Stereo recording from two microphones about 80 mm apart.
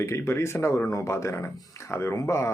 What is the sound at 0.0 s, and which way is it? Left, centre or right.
Speech, left.